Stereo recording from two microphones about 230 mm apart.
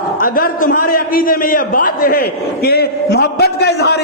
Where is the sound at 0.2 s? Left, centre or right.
Left.